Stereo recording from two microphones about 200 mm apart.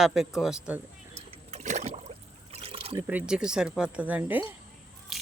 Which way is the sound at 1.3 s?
35° right (ahead or behind).